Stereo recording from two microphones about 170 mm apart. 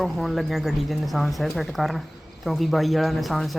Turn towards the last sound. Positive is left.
turn(degrees=0)  # may be behind; listen again after turning